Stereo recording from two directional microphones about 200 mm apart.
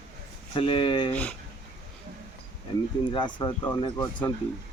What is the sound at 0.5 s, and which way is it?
Speech, 25° left (ahead or behind).